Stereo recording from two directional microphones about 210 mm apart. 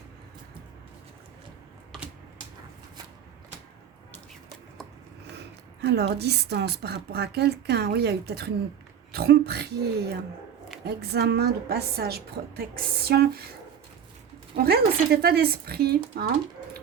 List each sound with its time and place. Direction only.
5.8 s a woman's voice: 55° right (ahead or behind)
14.5 s a woman's voice: 50° right (ahead or behind)